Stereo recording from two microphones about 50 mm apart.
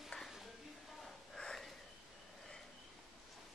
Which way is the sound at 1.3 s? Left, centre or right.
Centre.